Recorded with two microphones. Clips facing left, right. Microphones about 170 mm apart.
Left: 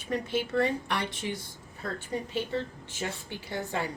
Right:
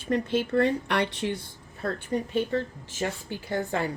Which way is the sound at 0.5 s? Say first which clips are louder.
Right 5 dB; 60° right (ahead or behind).